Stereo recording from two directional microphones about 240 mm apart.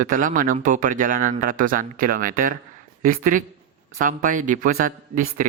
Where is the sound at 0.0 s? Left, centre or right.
Right.